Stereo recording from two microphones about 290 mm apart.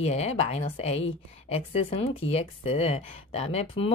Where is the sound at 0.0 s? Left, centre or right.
Left.